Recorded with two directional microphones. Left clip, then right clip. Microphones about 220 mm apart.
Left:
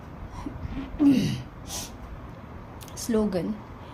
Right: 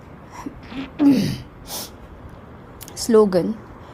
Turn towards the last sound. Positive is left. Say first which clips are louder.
# right 11 dB
turn(degrees=-35)  # may be behind; listen again after turning